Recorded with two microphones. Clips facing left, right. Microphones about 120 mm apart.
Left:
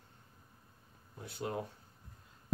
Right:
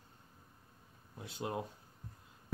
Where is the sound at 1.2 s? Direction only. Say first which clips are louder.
Left 1 dB; 20° right (ahead or behind).